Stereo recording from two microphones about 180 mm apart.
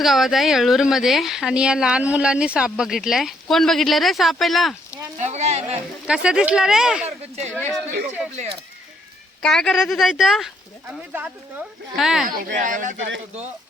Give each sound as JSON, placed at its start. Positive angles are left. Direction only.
{"t": 0.0, "sound": "speech", "side_deg": 0}
{"t": 5.1, "sound": "speech", "side_deg": -40}
{"t": 6.1, "sound": "speech", "side_deg": -5}
{"t": 7.0, "sound": "speech", "side_deg": -40}
{"t": 9.4, "sound": "speech", "side_deg": 5}
{"t": 12.4, "sound": "speech", "side_deg": -45}